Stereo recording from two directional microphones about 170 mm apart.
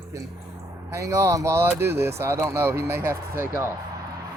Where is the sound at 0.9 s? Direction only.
15° right (ahead or behind).